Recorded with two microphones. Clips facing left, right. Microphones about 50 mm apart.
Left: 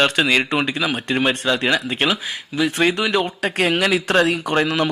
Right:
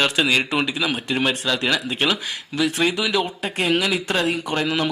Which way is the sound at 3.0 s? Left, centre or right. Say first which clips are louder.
Left 3 dB; centre.